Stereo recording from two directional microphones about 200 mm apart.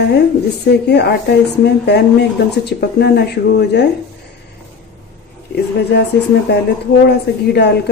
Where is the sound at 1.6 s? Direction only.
55° left (ahead or behind).